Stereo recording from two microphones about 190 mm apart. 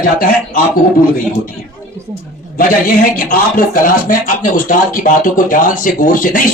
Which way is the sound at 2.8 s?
50° left (ahead or behind).